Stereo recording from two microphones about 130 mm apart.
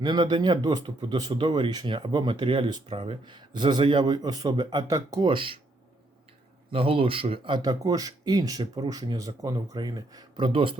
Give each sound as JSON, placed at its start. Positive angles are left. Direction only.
{"t": 0.0, "sound": "speech", "side_deg": -35}
{"t": 5.3, "sound": "speech", "side_deg": -40}
{"t": 6.7, "sound": "speech", "side_deg": -45}